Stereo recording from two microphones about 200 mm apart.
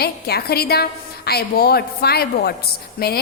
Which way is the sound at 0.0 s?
50° left (ahead or behind).